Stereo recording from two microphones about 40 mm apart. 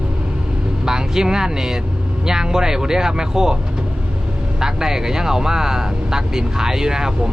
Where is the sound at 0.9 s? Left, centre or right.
Centre.